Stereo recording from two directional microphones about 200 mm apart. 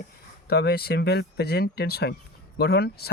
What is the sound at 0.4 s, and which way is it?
Speech, 55° left (ahead or behind).